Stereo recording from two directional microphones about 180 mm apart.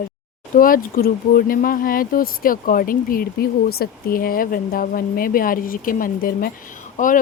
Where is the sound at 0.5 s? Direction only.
50° left (ahead or behind).